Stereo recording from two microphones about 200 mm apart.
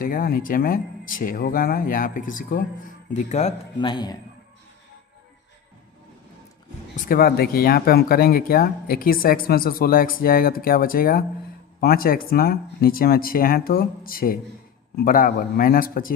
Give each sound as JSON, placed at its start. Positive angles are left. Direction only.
{"t": 0.0, "sound": "speech", "side_deg": 45}
{"t": 3.8, "sound": "a man's voice", "side_deg": 20}
{"t": 6.9, "sound": "speech", "side_deg": 45}